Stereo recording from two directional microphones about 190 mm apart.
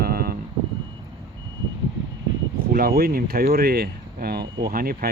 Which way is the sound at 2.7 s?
50° right (ahead or behind).